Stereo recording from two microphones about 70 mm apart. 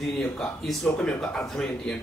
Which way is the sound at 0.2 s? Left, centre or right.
Centre.